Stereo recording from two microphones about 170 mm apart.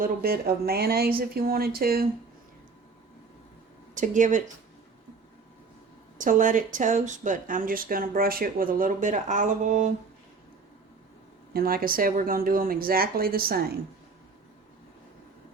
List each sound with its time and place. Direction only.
0.0 s speech: 60° right (ahead or behind)
3.9 s speech: 50° right (ahead or behind)
6.1 s speech: 50° right (ahead or behind)
11.5 s speech: 60° right (ahead or behind)